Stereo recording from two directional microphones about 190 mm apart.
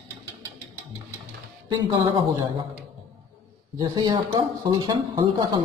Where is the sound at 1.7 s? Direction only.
25° right (ahead or behind).